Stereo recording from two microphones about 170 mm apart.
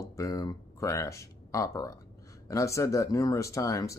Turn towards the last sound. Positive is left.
turn(degrees=20)  # may be behind; listen again after turning